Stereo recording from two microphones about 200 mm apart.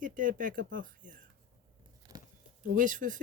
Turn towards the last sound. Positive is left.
turn(degrees=-40)  # may be behind; listen again after turning